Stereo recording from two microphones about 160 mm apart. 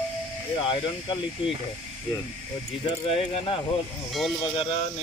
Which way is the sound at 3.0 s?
40° left (ahead or behind).